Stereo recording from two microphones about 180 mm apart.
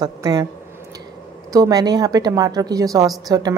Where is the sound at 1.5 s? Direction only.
20° right (ahead or behind).